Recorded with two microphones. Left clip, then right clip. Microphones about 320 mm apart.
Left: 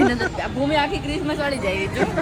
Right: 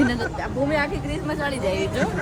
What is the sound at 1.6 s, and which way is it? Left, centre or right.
Speech, centre.